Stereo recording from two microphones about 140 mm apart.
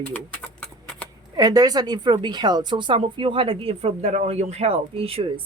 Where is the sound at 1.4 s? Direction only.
25° right (ahead or behind); by 5.3 s 40° right (ahead or behind).